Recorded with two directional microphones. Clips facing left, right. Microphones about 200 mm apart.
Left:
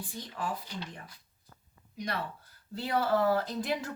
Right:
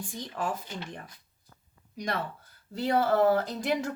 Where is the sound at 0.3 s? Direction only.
45° right (ahead or behind).